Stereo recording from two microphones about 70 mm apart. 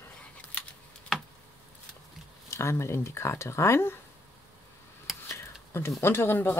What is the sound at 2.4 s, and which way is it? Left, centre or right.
Speech, left.